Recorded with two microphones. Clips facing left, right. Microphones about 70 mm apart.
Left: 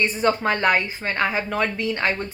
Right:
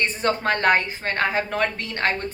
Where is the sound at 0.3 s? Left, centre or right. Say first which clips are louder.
Right 1 dB; right.